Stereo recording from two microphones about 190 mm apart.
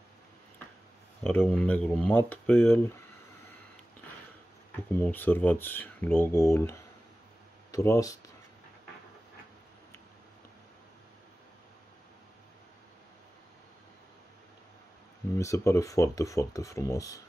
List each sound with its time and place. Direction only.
1.2 s speech: 10° left (ahead or behind)
4.9 s speech: 10° left (ahead or behind)
15.3 s speech: 15° left (ahead or behind)